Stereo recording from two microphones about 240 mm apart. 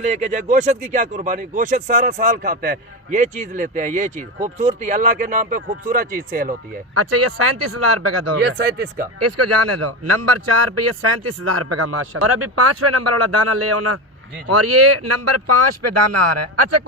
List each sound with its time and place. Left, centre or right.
0.0 s speech: right
6.9 s speech: right
8.4 s speech: right
9.1 s a man's voice: right